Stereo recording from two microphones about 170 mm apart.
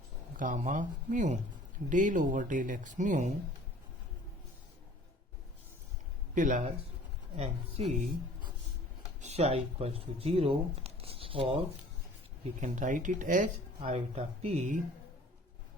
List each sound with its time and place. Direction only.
0.3 s speech: 50° right (ahead or behind)
6.3 s speech: 50° right (ahead or behind)
9.2 s speech: 40° right (ahead or behind)
12.5 s speech: 45° right (ahead or behind)